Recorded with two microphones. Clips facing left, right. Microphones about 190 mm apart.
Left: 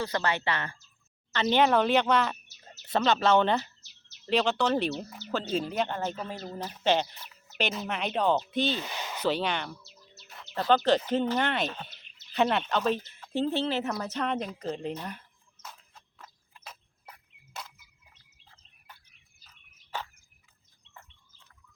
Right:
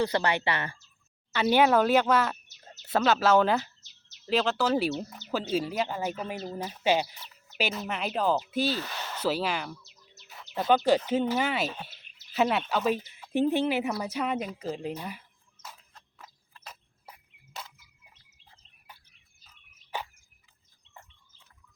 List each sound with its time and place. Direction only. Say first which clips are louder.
0.0 s speech: right 3 dB; 15° right (ahead or behind)
8.8 s a sound: even; 15° left (ahead or behind)
9.2 s speech: even; 5° right (ahead or behind)
10.2 s bird: even; 10° right (ahead or behind)
11.1 s speech: even; 5° right (ahead or behind)
19.9 s a sound: right 1 dB; 15° right (ahead or behind)